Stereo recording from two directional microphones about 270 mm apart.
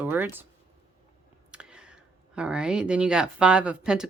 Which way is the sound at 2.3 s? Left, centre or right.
Centre.